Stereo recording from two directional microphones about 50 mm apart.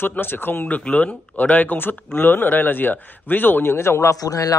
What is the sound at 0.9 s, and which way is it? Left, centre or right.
A man's voice, left.